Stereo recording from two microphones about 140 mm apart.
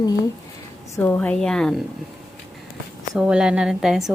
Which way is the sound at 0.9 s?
15° left (ahead or behind).